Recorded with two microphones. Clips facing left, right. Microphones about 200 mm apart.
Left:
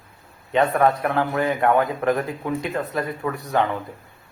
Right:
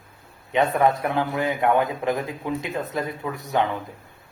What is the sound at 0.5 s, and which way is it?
A man's voice, 20° right (ahead or behind).